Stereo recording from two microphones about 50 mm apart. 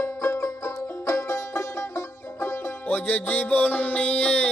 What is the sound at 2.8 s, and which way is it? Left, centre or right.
Music, left.